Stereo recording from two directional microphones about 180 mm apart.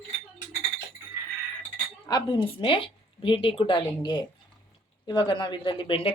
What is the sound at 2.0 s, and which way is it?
A woman's voice, 25° left (ahead or behind).